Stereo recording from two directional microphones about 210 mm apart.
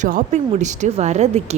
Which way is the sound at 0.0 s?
40° right (ahead or behind).